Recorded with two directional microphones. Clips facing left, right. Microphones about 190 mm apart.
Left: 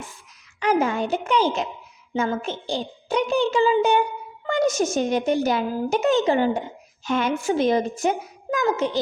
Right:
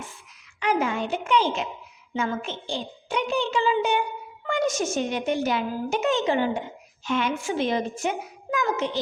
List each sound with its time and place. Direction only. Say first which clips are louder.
0.6 s a woman's voice: left 3 dB; 40° left (ahead or behind)